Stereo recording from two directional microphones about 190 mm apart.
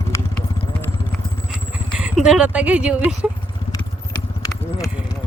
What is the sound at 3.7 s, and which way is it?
Clip-clop, 20° left (ahead or behind).